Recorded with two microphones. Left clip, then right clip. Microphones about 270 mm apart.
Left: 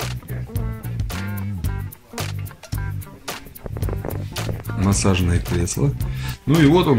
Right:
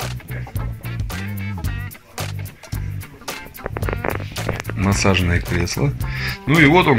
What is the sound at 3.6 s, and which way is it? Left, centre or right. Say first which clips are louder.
Music: right 8 dB; right.